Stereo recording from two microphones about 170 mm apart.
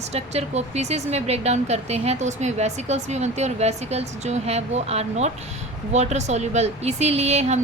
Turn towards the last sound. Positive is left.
turn(degrees=-40)  # may be behind; listen again after turning